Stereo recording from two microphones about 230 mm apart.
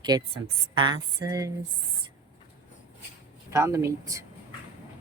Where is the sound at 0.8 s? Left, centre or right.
Centre.